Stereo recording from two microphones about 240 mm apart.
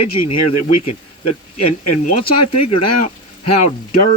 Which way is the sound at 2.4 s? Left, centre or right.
Left.